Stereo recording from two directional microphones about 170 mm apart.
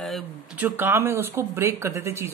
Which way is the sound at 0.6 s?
10° right (ahead or behind).